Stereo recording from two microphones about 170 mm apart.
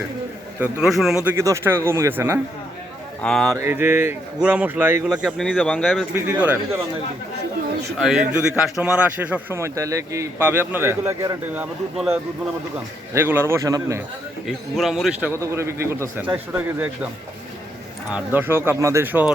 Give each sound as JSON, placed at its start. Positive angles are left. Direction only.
{"t": 0.6, "sound": "a man's voice", "side_deg": -5}
{"t": 1.4, "sound": "a man's voice", "side_deg": -15}
{"t": 3.2, "sound": "a man's voice", "side_deg": 5}
{"t": 3.5, "sound": "a man's voice", "side_deg": -15}
{"t": 6.1, "sound": "a man's voice", "side_deg": -10}
{"t": 8.0, "sound": "a man's voice", "side_deg": -5}
{"t": 14.4, "sound": "a man's voice", "side_deg": 0}
{"t": 15.3, "sound": "a man's voice", "side_deg": -15}
{"t": 18.1, "sound": "a man's voice", "side_deg": -10}